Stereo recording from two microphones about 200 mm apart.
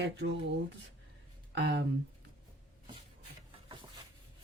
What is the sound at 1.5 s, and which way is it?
Speech, 60° right (ahead or behind).